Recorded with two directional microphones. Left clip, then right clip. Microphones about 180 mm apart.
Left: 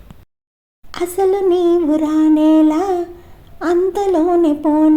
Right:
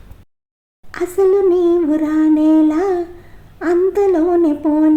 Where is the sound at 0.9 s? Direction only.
25° left (ahead or behind).